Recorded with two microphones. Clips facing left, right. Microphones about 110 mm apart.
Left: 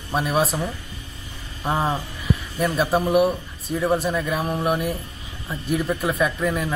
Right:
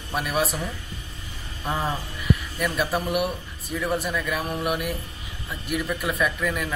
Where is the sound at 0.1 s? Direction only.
25° left (ahead or behind).